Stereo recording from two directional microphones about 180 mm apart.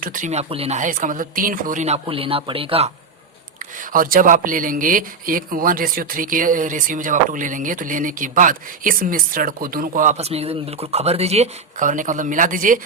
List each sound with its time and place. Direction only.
0.0 s speech: 50° right (ahead or behind); by 2.9 s 30° right (ahead or behind)
3.6 s speech: 50° right (ahead or behind)